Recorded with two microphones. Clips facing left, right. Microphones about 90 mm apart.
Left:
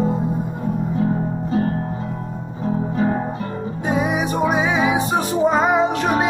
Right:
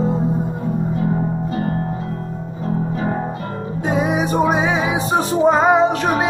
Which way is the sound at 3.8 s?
25° right (ahead or behind).